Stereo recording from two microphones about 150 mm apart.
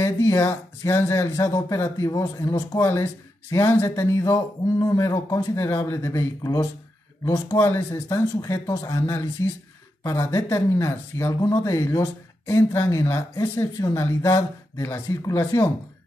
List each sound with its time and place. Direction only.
0.0 s speech: 20° left (ahead or behind)